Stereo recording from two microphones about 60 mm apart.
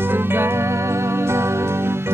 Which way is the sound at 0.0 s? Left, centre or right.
Right.